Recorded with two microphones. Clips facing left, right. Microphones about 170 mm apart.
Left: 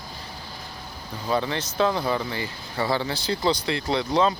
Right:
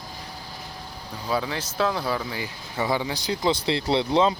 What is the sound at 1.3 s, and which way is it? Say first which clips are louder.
Speech: left 2 dB; 5° right (ahead or behind).